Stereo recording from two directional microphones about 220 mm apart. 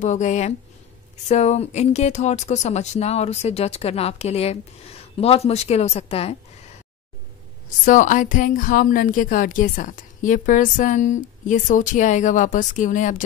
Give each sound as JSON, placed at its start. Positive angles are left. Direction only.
{"t": 0.0, "sound": "a woman's voice", "side_deg": 30}
{"t": 7.8, "sound": "a woman's voice", "side_deg": 35}